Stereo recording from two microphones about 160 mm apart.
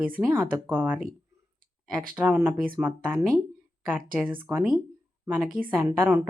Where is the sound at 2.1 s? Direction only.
10° right (ahead or behind).